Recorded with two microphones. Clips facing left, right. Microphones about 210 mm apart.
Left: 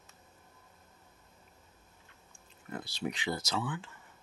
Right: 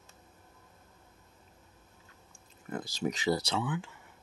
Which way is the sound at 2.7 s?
45° right (ahead or behind).